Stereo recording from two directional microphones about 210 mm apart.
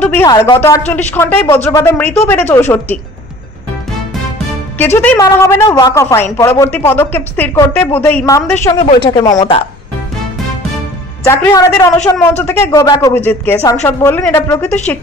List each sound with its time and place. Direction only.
0.0 s speech: 10° left (ahead or behind)
4.7 s speech: 10° left (ahead or behind)
8.8 s speech: 25° left (ahead or behind)
11.2 s speech: 10° left (ahead or behind)